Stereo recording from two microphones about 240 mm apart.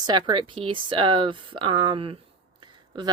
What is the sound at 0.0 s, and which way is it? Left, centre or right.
Speech, centre.